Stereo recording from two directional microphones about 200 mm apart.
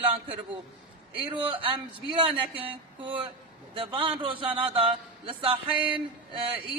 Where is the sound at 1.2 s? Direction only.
25° right (ahead or behind).